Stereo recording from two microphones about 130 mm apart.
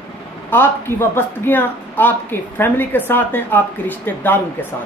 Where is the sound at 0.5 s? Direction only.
15° left (ahead or behind).